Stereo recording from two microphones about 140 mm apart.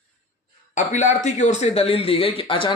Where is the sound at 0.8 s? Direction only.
60° left (ahead or behind); by 2.7 s 40° left (ahead or behind).